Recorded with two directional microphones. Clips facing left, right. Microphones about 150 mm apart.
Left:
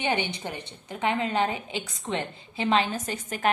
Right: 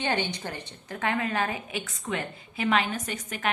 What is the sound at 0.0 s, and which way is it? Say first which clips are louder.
A woman's voice: left 1 dB; 15° left (ahead or behind).